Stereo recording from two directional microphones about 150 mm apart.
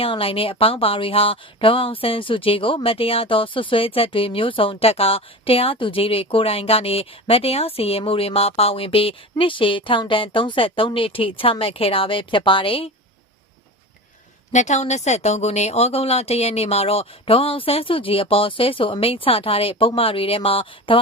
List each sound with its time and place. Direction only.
0.0 s a woman's voice: 40° left (ahead or behind)
14.5 s a woman's voice: 50° left (ahead or behind)